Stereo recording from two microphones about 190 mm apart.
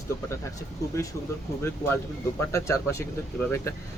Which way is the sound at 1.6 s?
15° left (ahead or behind).